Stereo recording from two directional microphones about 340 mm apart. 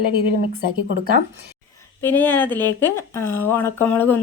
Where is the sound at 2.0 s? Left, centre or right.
Centre.